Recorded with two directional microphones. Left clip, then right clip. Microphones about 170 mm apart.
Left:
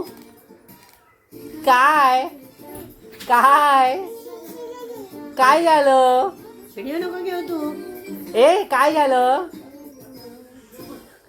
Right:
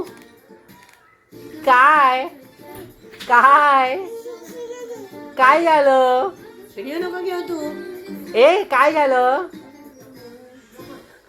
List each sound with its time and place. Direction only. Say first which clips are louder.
1.6 s a woman's voice: right 2 dB; 5° left (ahead or behind)
5.3 s a woman's voice: right 1 dB; 5° left (ahead or behind)
6.7 s speech: right 1 dB; 55° left (ahead or behind)
8.3 s a woman's voice: right 1 dB; 10° left (ahead or behind)